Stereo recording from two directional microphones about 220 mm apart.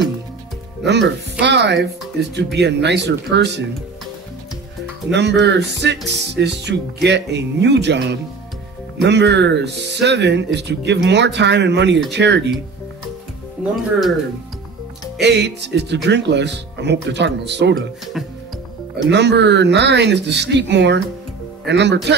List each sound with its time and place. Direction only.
0.8 s speech: 50° right (ahead or behind)
5.1 s speech: 50° right (ahead or behind)
15.2 s speech: 50° right (ahead or behind)
18.2 s speech: centre (ahead or behind)
19.0 s speech: 50° right (ahead or behind)